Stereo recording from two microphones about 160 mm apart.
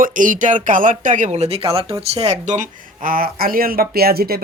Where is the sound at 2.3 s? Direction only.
50° right (ahead or behind).